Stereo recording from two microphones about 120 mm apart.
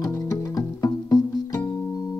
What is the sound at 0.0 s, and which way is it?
Music, 30° left (ahead or behind).